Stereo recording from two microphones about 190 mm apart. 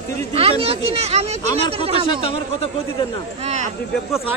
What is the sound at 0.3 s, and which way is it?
Speech, 30° right (ahead or behind).